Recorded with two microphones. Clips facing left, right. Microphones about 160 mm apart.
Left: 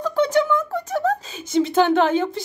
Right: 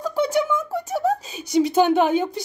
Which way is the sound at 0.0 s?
10° right (ahead or behind).